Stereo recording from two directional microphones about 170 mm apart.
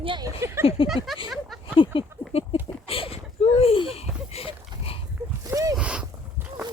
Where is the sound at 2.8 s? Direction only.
35° left (ahead or behind).